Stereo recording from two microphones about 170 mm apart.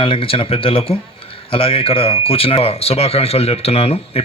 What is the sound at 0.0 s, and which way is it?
A man's voice, 30° left (ahead or behind).